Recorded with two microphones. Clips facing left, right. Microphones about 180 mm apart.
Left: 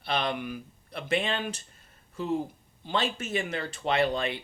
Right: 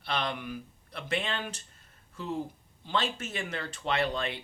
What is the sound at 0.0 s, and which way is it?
Speech, 15° left (ahead or behind).